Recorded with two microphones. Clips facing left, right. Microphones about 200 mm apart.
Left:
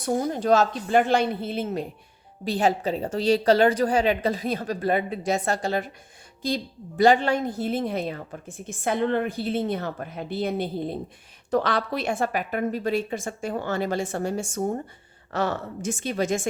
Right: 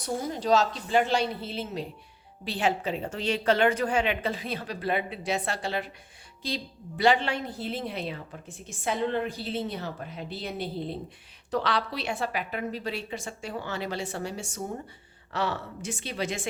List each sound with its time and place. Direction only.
0.0 s a woman's voice: 55° left (ahead or behind)
2.4 s a woman's voice: 40° left (ahead or behind)